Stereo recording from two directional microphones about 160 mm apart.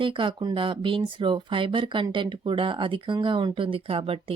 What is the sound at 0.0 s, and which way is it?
Speech, 30° right (ahead or behind).